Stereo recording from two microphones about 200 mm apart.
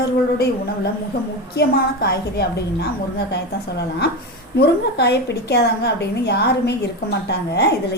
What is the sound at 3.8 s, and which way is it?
A woman's voice, 55° left (ahead or behind).